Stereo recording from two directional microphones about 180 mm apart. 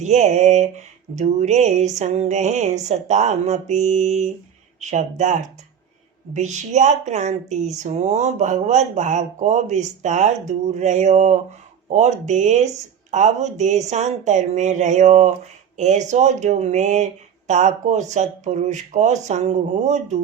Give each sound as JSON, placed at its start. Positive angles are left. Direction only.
{"t": 0.0, "sound": "speech", "side_deg": -40}